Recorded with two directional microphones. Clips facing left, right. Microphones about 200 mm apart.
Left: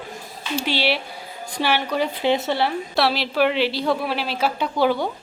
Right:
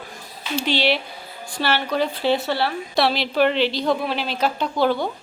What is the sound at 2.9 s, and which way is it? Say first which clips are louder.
A woman's voice: right 1 dB; 5° left (ahead or behind).